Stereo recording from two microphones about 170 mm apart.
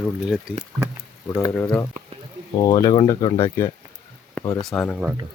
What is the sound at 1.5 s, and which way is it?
Speech, 10° left (ahead or behind).